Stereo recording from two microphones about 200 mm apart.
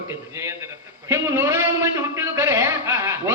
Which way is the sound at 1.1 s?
15° right (ahead or behind).